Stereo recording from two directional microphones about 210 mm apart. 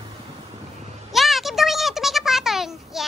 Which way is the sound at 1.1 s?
Centre (ahead or behind).